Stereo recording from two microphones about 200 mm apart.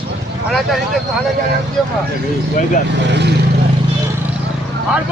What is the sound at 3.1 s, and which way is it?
Speech, 55° right (ahead or behind).